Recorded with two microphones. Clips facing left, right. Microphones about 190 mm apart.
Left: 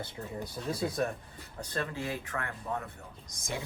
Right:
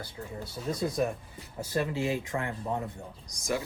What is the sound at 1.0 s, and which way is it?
A man's voice, 5° right (ahead or behind).